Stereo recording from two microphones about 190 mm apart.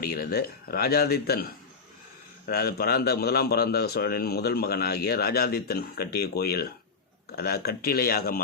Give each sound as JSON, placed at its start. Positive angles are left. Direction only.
{"t": 0.0, "sound": "a man's voice", "side_deg": 55}
{"t": 2.5, "sound": "a man's voice", "side_deg": 55}